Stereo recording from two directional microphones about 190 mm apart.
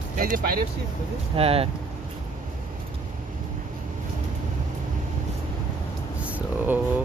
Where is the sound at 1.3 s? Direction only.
30° right (ahead or behind).